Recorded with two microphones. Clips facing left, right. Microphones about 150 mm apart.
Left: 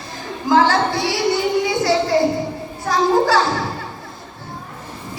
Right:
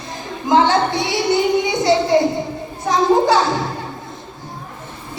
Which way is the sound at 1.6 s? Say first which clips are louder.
Right 1 dB; 20° right (ahead or behind).